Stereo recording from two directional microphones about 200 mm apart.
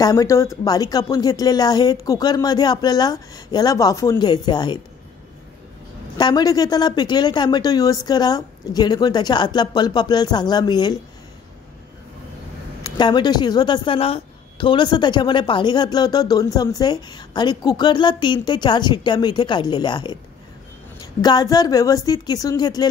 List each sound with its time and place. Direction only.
0.0 s a woman's voice: 20° left (ahead or behind)
6.1 s a woman's voice: 20° left (ahead or behind)
12.8 s a woman's voice: 20° left (ahead or behind)